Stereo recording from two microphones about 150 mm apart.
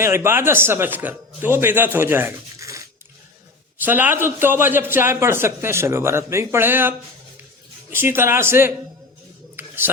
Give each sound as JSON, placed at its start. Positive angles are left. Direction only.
{"t": 0.0, "sound": "a man's voice", "side_deg": -15}
{"t": 3.8, "sound": "a man's voice", "side_deg": -10}
{"t": 9.6, "sound": "a sound", "side_deg": -15}